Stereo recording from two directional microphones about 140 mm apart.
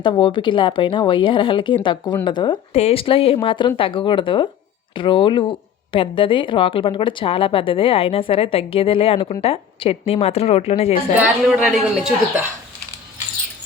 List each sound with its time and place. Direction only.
0.0 s a woman's voice: 35° left (ahead or behind)
2.7 s a woman's voice: 45° left (ahead or behind)
11.4 s speech: 5° right (ahead or behind)